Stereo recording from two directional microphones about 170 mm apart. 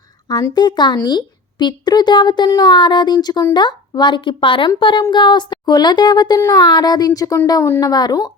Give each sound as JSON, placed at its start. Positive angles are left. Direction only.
{"t": 0.3, "sound": "a woman's voice", "side_deg": 25}